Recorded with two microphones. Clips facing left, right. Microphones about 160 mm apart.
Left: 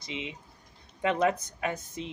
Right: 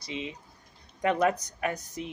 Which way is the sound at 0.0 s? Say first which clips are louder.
Right 2 dB; 20° left (ahead or behind).